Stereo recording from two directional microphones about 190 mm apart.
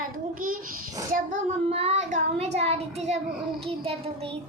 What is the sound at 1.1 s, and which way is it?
Child singing, 40° right (ahead or behind).